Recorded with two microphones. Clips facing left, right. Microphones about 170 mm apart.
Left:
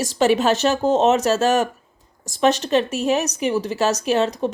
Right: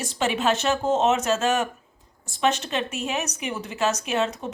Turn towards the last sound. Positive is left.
turn(degrees=35)  # may be behind; listen again after turning